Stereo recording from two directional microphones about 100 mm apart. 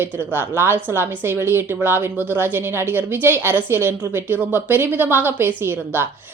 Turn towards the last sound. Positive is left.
turn(degrees=-20)  # may be behind; listen again after turning